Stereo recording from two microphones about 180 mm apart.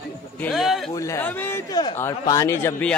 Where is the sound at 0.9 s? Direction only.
15° left (ahead or behind).